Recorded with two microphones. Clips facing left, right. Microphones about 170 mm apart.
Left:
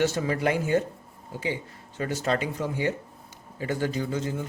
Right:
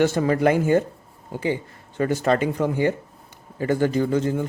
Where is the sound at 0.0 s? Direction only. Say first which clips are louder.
Right 6 dB; 55° right (ahead or behind).